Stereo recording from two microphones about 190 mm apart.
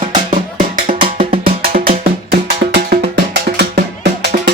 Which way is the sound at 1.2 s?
45° right (ahead or behind).